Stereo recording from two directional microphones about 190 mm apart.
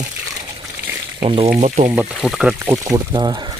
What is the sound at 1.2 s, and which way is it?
Speech, 30° right (ahead or behind).